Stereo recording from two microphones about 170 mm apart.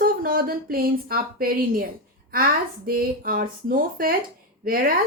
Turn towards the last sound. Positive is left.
turn(degrees=-55)  # may be behind; listen again after turning